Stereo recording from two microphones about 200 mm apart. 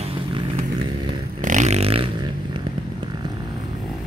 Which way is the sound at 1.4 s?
35° right (ahead or behind).